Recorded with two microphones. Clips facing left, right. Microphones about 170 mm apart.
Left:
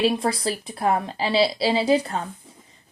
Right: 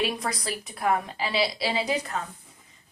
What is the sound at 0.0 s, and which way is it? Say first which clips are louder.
A woman's voice: left 7 dB; 30° left (ahead or behind).